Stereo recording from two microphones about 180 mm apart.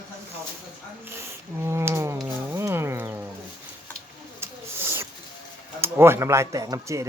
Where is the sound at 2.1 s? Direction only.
10° right (ahead or behind).